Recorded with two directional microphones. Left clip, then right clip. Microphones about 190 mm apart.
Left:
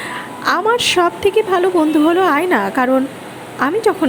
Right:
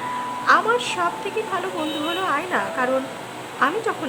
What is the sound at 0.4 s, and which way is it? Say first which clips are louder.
A woman's voice: left 4 dB; 35° left (ahead or behind).